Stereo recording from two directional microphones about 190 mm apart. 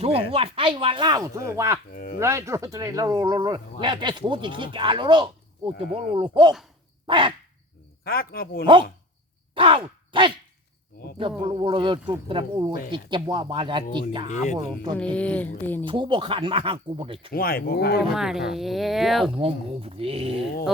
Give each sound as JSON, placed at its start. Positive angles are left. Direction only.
{"t": 0.0, "sound": "speech", "side_deg": -30}
{"t": 8.0, "sound": "speech", "side_deg": 50}
{"t": 9.6, "sound": "a sound", "side_deg": -25}
{"t": 11.2, "sound": "speech", "side_deg": -30}
{"t": 14.3, "sound": "speech", "side_deg": 40}
{"t": 14.9, "sound": "speech", "side_deg": 5}
{"t": 15.9, "sound": "speech", "side_deg": -25}
{"t": 17.3, "sound": "speech", "side_deg": 50}
{"t": 18.0, "sound": "speech", "side_deg": 0}
{"t": 19.4, "sound": "speech", "side_deg": -30}